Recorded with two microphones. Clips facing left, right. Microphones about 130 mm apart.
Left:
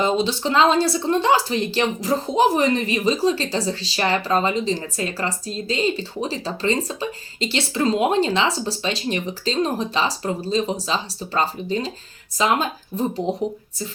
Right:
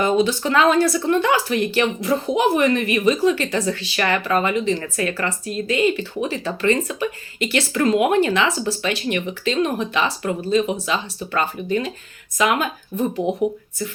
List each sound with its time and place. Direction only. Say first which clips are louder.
0.0 s speech: right 2 dB; 25° left (ahead or behind)